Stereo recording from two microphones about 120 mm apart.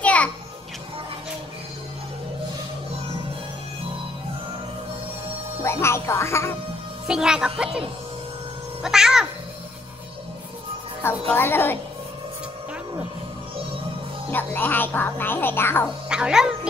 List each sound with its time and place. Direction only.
0.0 s music: 10° left (ahead or behind)
5.6 s speech: 20° left (ahead or behind)
7.1 s a child's voice: 5° right (ahead or behind)
8.8 s a child's voice: 5° right (ahead or behind)
11.0 s speech: 15° left (ahead or behind)
14.3 s speech: 15° left (ahead or behind)
16.1 s a child's voice: 5° right (ahead or behind)